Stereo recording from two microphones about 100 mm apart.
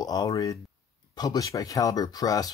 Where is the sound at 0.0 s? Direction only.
35° left (ahead or behind).